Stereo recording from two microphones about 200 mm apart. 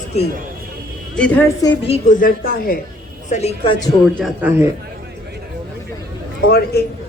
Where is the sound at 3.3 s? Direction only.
30° left (ahead or behind).